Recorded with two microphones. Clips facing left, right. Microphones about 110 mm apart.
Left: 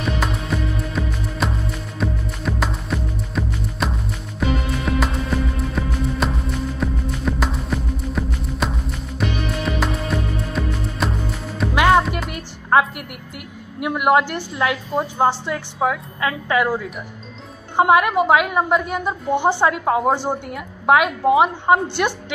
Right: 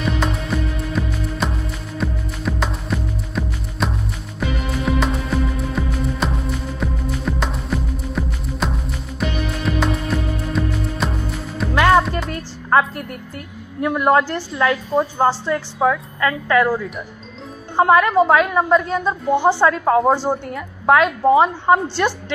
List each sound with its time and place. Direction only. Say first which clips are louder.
0.0 s music: right 2 dB; centre (ahead or behind)
11.7 s music: right 1 dB; 15° left (ahead or behind)
13.7 s a woman's voice: right 1 dB; 15° left (ahead or behind)
19.8 s a woman's voice: right 3 dB; centre (ahead or behind)